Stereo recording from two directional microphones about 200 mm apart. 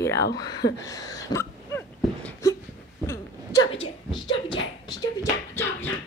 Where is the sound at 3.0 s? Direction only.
15° left (ahead or behind).